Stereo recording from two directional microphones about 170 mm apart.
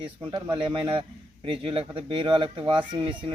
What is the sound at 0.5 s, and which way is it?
A man's voice, 30° right (ahead or behind).